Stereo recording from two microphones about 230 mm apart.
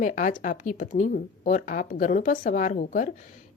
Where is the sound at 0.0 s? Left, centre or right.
Left.